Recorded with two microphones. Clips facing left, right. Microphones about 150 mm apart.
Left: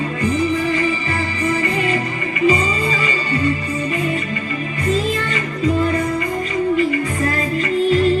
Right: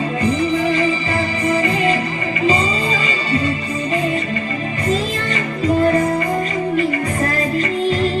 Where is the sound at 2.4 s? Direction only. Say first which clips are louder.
Left 1 dB; 30° right (ahead or behind).